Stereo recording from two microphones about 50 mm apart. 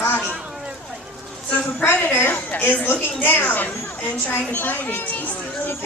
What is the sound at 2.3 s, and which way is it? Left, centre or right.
A woman's voice, left.